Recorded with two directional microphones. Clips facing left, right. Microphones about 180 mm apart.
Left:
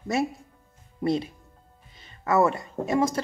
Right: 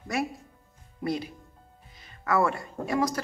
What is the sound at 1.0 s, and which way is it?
Speech, 25° left (ahead or behind).